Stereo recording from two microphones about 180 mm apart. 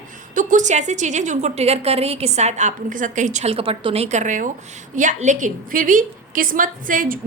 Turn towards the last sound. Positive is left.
turn(degrees=-50)  # may be behind; listen again after turning